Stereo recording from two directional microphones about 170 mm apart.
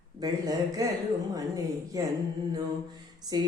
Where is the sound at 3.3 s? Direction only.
25° right (ahead or behind).